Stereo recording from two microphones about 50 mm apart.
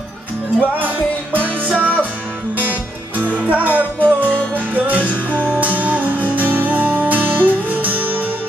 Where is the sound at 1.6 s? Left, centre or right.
Right.